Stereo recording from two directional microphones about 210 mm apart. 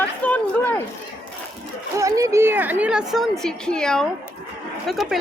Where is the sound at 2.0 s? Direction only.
15° right (ahead or behind).